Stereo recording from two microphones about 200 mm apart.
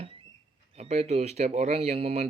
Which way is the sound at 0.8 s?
35° right (ahead or behind).